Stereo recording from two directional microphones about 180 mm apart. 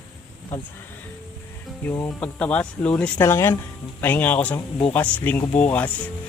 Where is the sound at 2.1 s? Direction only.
5° left (ahead or behind).